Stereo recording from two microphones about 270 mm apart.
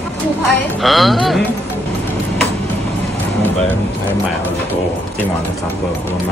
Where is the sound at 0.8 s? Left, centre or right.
Centre.